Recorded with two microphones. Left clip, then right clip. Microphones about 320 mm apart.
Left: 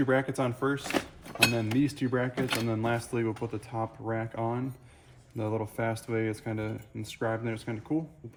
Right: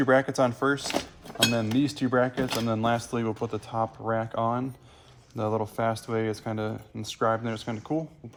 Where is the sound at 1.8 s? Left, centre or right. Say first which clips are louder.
Right 3 dB; right.